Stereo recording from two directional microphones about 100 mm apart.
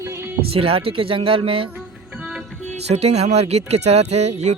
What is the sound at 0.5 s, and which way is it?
Speech, 70° right (ahead or behind).